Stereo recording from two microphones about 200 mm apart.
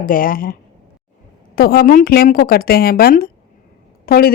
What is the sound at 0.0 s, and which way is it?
Speech, 45° left (ahead or behind).